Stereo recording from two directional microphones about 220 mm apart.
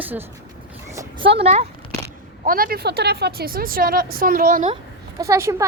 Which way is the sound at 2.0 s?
40° right (ahead or behind).